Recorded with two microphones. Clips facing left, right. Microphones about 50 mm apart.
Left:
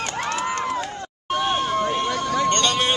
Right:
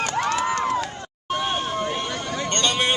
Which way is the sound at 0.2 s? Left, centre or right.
Right.